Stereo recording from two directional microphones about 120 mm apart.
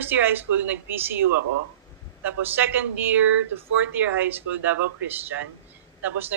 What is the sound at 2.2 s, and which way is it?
Speech, 15° right (ahead or behind).